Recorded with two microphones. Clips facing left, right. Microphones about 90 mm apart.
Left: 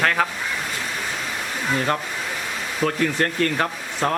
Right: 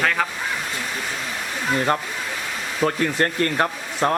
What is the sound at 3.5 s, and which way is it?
Speech, 5° right (ahead or behind).